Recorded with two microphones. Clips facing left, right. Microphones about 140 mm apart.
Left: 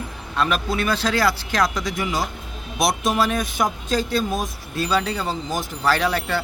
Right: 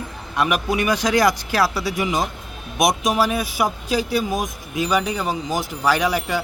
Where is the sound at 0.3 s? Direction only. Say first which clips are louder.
Right 2 dB; 15° right (ahead or behind).